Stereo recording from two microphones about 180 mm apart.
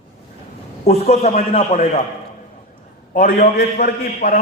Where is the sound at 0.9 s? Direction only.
35° left (ahead or behind).